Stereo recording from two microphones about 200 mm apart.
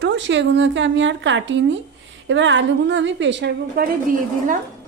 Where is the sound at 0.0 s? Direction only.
65° right (ahead or behind); by 4.6 s 45° right (ahead or behind).